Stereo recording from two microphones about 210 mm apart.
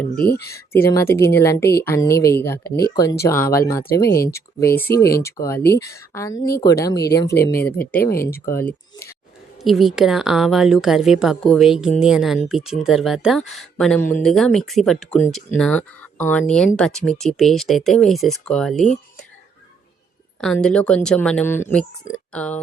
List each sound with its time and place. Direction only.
0.2 s speech: 45° left (ahead or behind)
0.4 s speech: 10° left (ahead or behind)
9.6 s a woman's voice: centre (ahead or behind)
20.4 s a woman's voice: 5° left (ahead or behind)